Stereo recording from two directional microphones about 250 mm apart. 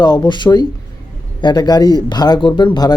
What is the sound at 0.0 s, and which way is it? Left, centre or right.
A man's voice, centre.